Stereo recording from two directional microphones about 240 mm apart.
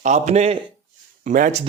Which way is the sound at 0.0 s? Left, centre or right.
Right.